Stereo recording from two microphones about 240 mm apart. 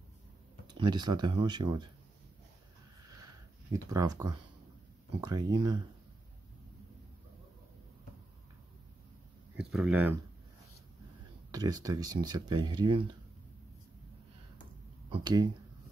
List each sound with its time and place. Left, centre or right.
0.7 s speech: centre
3.7 s speech: centre
9.6 s speech: centre
11.5 s speech: centre
15.0 s speech: centre